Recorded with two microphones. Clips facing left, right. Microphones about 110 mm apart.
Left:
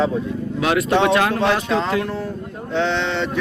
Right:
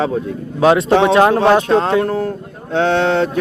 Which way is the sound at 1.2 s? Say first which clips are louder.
Right 7 dB; 50° right (ahead or behind).